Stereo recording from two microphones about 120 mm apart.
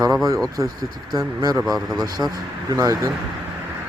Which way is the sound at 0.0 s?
30° right (ahead or behind).